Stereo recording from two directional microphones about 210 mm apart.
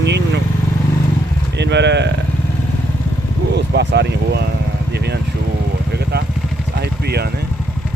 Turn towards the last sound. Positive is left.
turn(degrees=-50)  # may be behind; listen again after turning